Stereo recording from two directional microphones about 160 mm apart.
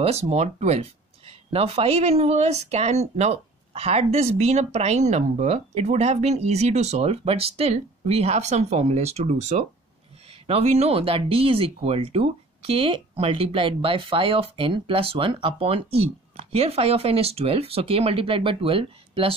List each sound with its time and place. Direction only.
0.0 s speech: 40° right (ahead or behind)